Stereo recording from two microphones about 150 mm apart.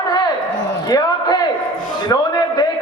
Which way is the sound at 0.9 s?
25° left (ahead or behind).